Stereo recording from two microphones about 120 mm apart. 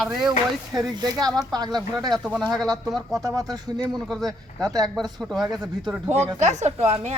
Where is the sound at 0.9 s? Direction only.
30° right (ahead or behind).